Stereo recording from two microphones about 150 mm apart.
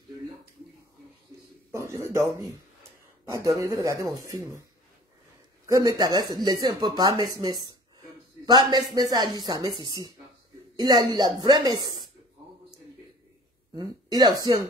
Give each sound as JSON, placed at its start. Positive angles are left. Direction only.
{"t": 1.7, "sound": "a sound", "side_deg": -20}
{"t": 3.3, "sound": "speech", "side_deg": -20}
{"t": 5.7, "sound": "speech", "side_deg": -25}
{"t": 13.7, "sound": "speech", "side_deg": -30}